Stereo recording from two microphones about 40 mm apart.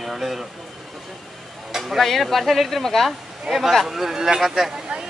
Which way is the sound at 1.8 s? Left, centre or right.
Centre.